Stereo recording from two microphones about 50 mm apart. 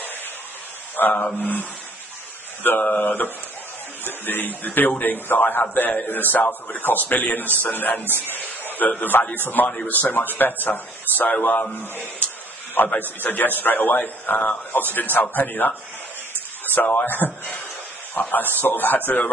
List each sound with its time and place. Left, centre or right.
0.9 s a man's voice: left
4.0 s a man's voice: left
8.1 s speech: right
8.4 s a man's voice: left
16.7 s a man's voice: left